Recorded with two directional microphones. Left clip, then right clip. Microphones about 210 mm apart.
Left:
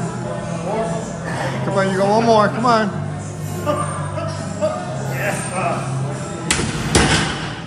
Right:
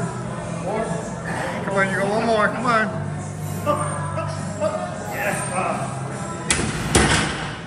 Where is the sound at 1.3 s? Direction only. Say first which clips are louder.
Left 2 dB; 5° left (ahead or behind).